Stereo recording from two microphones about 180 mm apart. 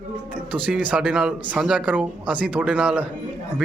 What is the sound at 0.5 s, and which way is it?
Speech, 5° right (ahead or behind).